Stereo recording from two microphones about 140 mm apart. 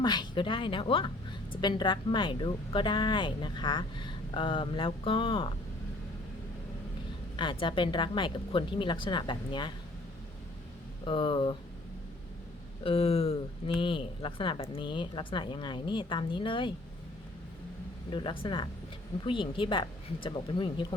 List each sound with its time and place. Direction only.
0.0 s speech: 30° left (ahead or behind)
7.6 s speech: 35° left (ahead or behind)
11.0 s speech: 35° left (ahead or behind)
12.8 s speech: 45° left (ahead or behind)
18.1 s speech: 35° left (ahead or behind)